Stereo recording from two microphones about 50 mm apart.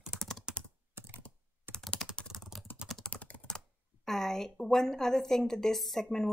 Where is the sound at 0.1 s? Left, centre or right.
Centre.